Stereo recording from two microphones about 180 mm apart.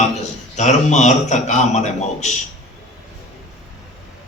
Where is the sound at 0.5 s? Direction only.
40° left (ahead or behind).